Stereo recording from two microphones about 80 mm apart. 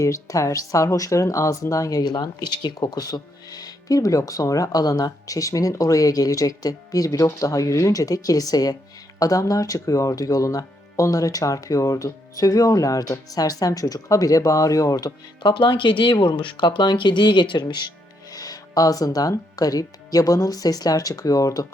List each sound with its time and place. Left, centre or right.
0.0 s speech: left
15.4 s speech: left
18.3 s a sound: left
19.5 s speech: left